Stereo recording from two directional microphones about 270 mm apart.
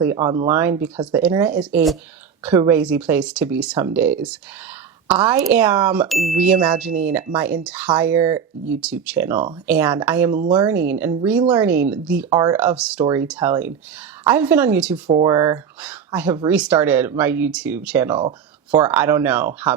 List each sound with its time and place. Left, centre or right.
0.2 s speech: centre
15.0 s speech: centre
18.2 s speech: centre
18.8 s speech: centre